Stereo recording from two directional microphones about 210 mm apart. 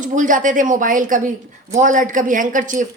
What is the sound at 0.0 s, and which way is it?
A woman's voice, 40° right (ahead or behind).